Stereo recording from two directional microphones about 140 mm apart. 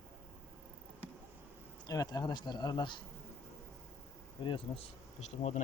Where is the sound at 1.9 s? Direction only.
25° left (ahead or behind).